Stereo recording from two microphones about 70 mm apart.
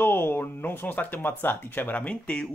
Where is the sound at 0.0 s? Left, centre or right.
Left.